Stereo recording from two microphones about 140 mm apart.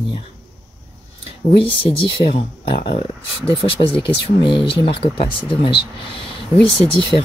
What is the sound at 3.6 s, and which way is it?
Speech, 40° left (ahead or behind).